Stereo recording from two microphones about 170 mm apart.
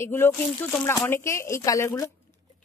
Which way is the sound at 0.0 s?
15° left (ahead or behind).